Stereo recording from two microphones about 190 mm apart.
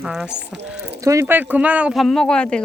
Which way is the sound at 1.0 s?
15° right (ahead or behind).